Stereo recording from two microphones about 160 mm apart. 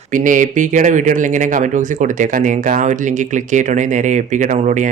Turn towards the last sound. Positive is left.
turn(degrees=-50)  # may be behind; listen again after turning